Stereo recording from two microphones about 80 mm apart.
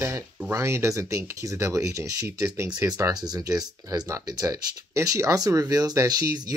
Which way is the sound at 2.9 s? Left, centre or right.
Right.